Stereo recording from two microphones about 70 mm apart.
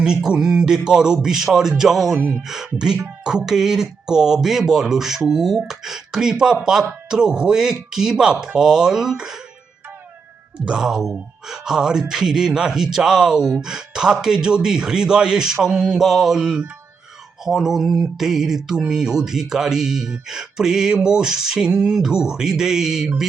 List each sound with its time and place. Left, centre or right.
0.0 s speech: centre
2.1 s speech: right
2.6 s speech: centre
10.7 s speech: centre